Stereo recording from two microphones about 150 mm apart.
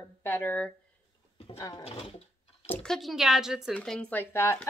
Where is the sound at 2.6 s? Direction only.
10° left (ahead or behind).